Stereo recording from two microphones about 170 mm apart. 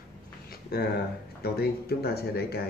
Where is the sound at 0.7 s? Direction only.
65° left (ahead or behind).